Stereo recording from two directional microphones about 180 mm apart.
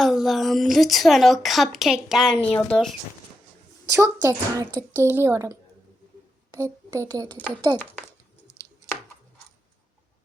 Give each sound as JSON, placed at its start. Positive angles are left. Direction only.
{"t": 0.0, "sound": "a woman's voice", "side_deg": 0}
{"t": 3.9, "sound": "speech", "side_deg": -15}
{"t": 7.3, "sound": "speech", "side_deg": 10}